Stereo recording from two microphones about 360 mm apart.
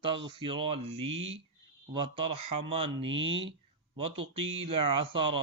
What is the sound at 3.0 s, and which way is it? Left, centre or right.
Speech, right.